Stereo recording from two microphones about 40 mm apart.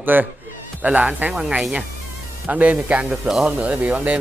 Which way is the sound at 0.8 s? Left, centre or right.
Right.